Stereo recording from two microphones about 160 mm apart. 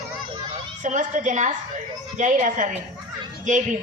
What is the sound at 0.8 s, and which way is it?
Speech, 50° right (ahead or behind).